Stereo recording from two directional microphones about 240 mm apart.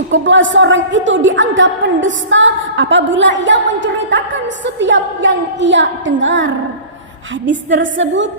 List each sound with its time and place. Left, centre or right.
0.1 s a woman's voice: right